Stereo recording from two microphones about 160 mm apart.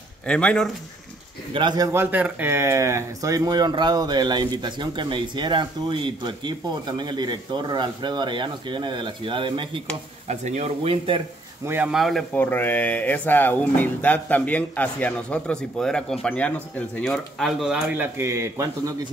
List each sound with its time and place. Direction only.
0.3 s speech: 5° left (ahead or behind)
1.5 s speech: 30° right (ahead or behind)
1.9 s speech: 15° right (ahead or behind); by 9.8 s 30° right (ahead or behind)
10.2 s speech: 45° right (ahead or behind)
11.6 s a man's voice: 15° right (ahead or behind)
11.9 s speech: centre (ahead or behind)
12.4 s speech: 10° left (ahead or behind); by 18.9 s 20° right (ahead or behind)